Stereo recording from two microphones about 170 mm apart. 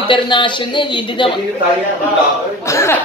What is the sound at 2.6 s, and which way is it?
Speech, 15° left (ahead or behind).